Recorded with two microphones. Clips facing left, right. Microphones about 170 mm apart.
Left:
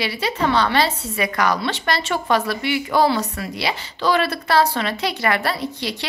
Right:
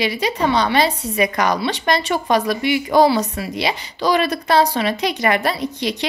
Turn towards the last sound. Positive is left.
turn(degrees=-15)  # may be behind; listen again after turning